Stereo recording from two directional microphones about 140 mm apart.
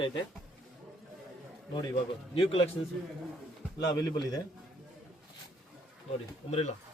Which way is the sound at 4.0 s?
30° left (ahead or behind).